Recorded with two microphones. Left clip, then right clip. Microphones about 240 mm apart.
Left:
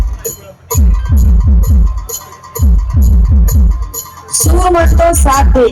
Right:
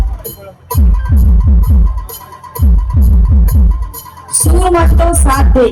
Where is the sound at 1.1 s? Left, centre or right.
Centre.